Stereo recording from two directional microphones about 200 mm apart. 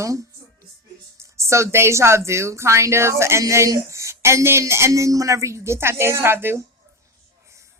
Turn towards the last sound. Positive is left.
turn(degrees=-10)  # may be behind; listen again after turning